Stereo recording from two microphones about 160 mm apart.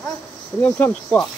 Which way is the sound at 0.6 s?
15° left (ahead or behind).